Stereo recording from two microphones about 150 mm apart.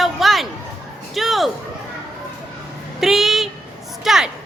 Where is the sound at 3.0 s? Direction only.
Centre (ahead or behind).